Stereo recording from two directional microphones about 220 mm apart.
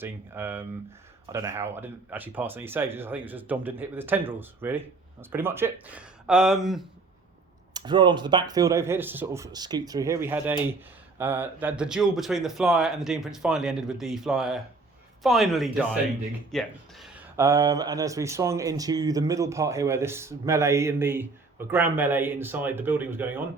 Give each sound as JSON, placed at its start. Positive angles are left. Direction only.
{"t": 0.0, "sound": "speech", "side_deg": -10}
{"t": 7.7, "sound": "speech", "side_deg": -20}
{"t": 17.3, "sound": "speech", "side_deg": -15}